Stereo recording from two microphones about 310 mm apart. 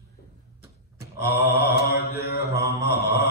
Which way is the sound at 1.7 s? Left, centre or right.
Left.